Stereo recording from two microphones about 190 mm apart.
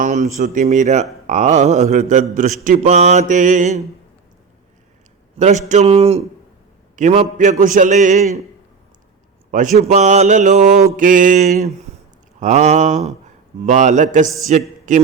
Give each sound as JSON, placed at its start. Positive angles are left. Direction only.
{"t": 0.0, "sound": "mantra", "side_deg": -40}
{"t": 5.4, "sound": "mantra", "side_deg": -40}
{"t": 6.9, "sound": "a man's voice", "side_deg": -35}
{"t": 9.5, "sound": "mantra", "side_deg": -40}
{"t": 10.9, "sound": "a man's voice", "side_deg": -45}
{"t": 12.4, "sound": "mantra", "side_deg": -35}
{"t": 14.4, "sound": "speech", "side_deg": -40}